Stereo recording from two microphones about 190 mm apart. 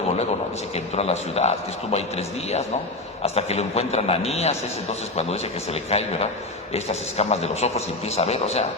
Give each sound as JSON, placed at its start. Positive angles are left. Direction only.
{"t": 0.9, "sound": "a man's voice", "side_deg": 35}